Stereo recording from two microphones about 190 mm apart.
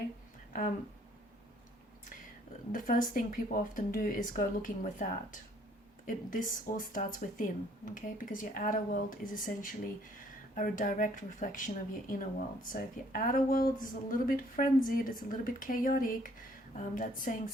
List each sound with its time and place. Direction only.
2.7 s speech: 45° left (ahead or behind)